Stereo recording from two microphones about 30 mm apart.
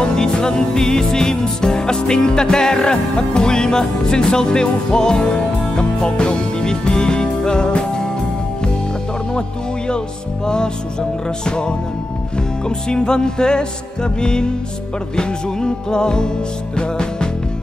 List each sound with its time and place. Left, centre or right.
0.0 s music: left
9.8 s music: left